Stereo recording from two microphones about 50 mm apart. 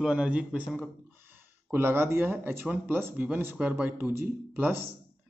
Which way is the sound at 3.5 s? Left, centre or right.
Right.